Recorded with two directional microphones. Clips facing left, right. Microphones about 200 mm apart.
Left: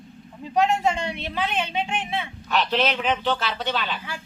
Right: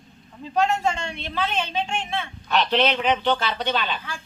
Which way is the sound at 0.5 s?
15° left (ahead or behind).